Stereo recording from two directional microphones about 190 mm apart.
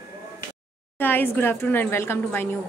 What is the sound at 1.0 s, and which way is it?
A woman's voice, 10° left (ahead or behind).